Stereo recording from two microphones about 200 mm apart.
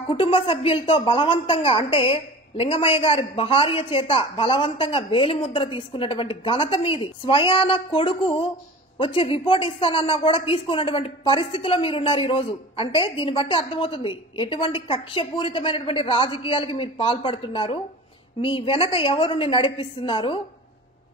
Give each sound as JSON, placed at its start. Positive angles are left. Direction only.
{"t": 0.1, "sound": "a woman's voice", "side_deg": 25}